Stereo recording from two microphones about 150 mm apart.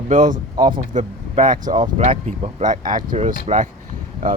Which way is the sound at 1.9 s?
50° right (ahead or behind).